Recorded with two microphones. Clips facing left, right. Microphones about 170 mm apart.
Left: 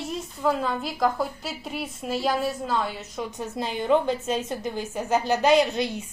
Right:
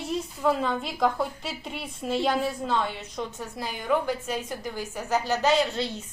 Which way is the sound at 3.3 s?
20° left (ahead or behind).